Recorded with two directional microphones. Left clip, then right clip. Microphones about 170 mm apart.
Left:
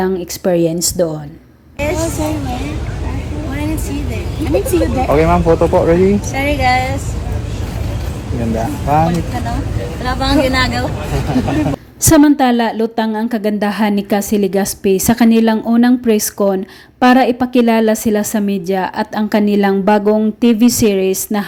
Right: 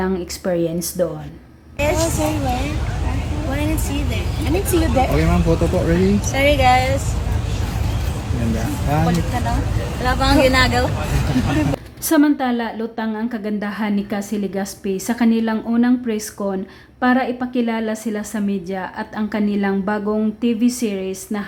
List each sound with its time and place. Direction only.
0.0 s a woman's voice: 30° left (ahead or behind)
1.8 s speech: centre (ahead or behind)
8.4 s speech: centre (ahead or behind)
12.0 s a woman's voice: 40° left (ahead or behind)